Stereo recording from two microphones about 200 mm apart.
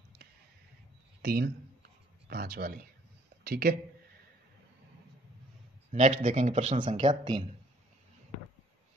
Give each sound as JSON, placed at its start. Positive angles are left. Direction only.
{"t": 1.2, "sound": "speech", "side_deg": -50}
{"t": 5.9, "sound": "speech", "side_deg": -40}
{"t": 7.1, "sound": "speech", "side_deg": -20}